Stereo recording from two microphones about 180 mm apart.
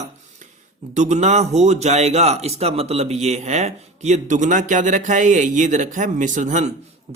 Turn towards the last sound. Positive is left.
turn(degrees=-40)  # may be behind; listen again after turning